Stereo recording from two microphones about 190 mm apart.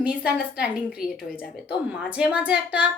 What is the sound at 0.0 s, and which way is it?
Speech, 5° right (ahead or behind).